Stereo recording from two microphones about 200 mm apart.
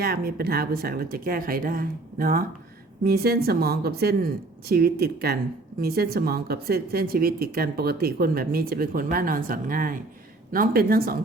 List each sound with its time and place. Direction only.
0.0 s speech: 50° right (ahead or behind)